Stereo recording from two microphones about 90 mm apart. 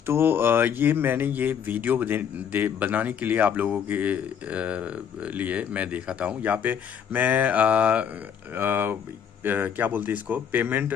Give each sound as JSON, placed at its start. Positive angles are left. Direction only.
{"t": 0.0, "sound": "speech", "side_deg": -25}